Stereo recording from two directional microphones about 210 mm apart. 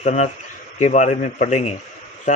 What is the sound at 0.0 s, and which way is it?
Speech, 30° left (ahead or behind).